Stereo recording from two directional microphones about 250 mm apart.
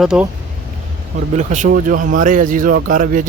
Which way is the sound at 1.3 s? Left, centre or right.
Right.